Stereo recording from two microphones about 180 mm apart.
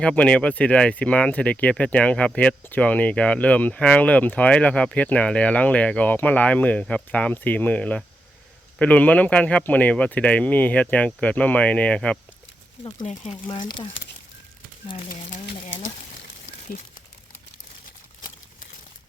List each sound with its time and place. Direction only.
0.0 s speech: 5° left (ahead or behind)
13.3 s speech: 25° left (ahead or behind)
15.1 s a sound: 70° left (ahead or behind)